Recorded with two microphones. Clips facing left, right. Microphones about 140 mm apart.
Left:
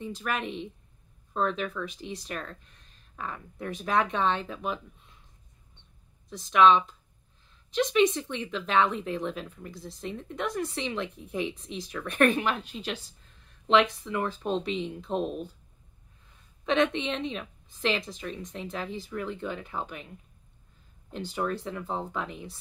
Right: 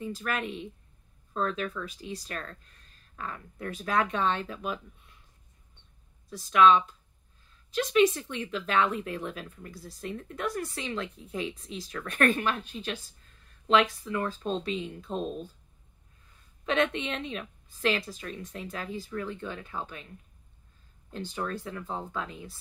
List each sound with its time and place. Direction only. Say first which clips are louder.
0.0 s speech: even; 20° left (ahead or behind)
6.2 s speech: left 1 dB; 20° left (ahead or behind)
7.8 s speech: even; 20° left (ahead or behind)
16.6 s speech: left 2 dB; 20° left (ahead or behind)
21.1 s speech: left 3 dB; 20° left (ahead or behind)